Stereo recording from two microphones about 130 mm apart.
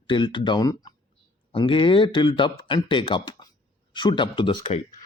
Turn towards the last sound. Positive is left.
turn(degrees=40)  # may be behind; listen again after turning